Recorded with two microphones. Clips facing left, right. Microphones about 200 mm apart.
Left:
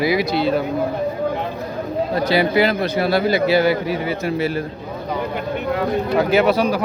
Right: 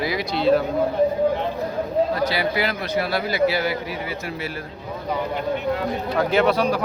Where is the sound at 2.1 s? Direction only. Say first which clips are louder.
Left 5 dB; 20° left (ahead or behind).